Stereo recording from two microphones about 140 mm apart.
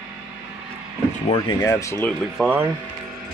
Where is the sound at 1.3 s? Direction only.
30° left (ahead or behind).